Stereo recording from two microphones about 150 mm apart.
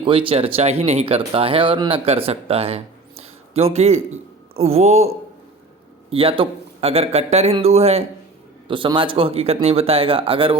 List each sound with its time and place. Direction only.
0.0 s a man's voice: 35° right (ahead or behind)